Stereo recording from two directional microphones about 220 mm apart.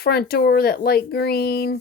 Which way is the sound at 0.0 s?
45° left (ahead or behind).